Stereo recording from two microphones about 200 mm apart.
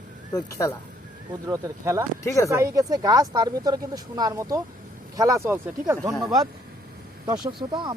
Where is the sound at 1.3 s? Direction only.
15° right (ahead or behind).